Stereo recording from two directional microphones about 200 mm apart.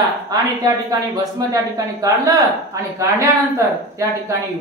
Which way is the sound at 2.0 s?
15° right (ahead or behind).